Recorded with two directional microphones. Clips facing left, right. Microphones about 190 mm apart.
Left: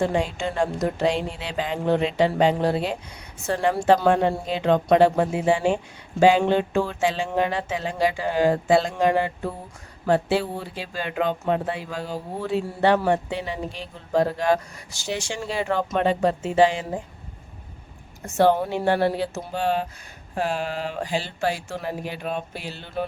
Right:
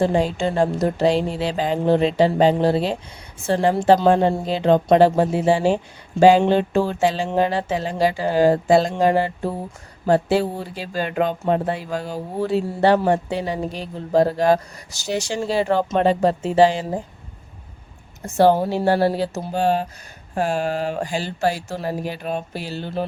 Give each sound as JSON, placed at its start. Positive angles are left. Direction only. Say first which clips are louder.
{"t": 0.0, "sound": "speech", "louder": "right 4 dB", "side_deg": -35}
{"t": 18.3, "sound": "speech", "louder": "right 3 dB", "side_deg": -35}